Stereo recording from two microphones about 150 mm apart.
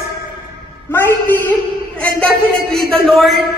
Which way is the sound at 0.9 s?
15° left (ahead or behind).